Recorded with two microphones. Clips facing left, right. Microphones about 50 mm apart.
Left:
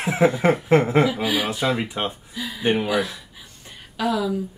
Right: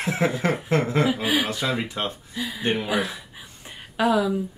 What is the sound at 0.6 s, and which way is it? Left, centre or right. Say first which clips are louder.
Speech: left 5 dB; left.